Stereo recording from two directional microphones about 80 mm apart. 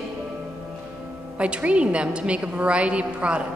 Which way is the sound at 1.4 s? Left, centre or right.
Centre.